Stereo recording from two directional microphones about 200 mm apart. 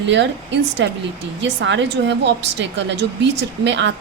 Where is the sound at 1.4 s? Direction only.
65° right (ahead or behind).